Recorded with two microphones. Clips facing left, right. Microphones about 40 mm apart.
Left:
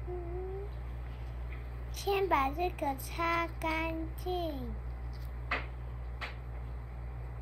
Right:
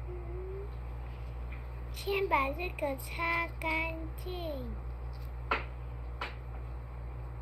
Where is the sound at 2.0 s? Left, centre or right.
Centre.